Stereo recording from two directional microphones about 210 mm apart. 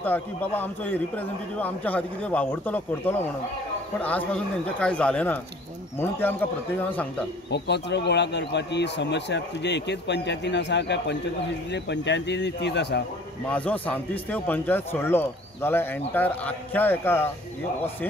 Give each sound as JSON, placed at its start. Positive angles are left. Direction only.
{"t": 0.0, "sound": "a man's voice", "side_deg": 10}
{"t": 7.5, "sound": "a man's voice", "side_deg": 55}
{"t": 13.5, "sound": "a man's voice", "side_deg": 5}